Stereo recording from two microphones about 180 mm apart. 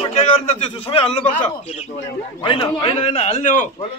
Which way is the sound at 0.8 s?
30° left (ahead or behind).